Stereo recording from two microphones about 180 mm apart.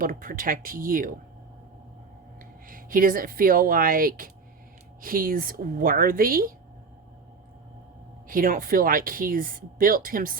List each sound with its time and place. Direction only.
0.0 s speech: 50° right (ahead or behind)
2.6 s speech: 50° right (ahead or behind)
8.3 s speech: 50° right (ahead or behind)